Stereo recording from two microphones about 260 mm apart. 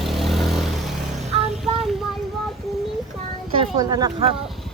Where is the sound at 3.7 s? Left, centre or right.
Centre.